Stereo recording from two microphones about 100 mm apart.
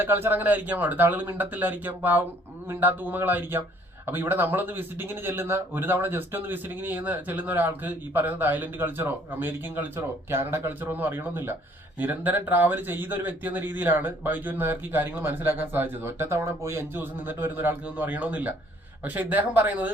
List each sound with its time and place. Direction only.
0.0 s speech: 20° right (ahead or behind)